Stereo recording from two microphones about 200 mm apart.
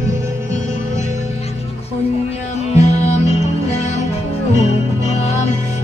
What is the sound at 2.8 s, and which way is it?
Music, 35° left (ahead or behind).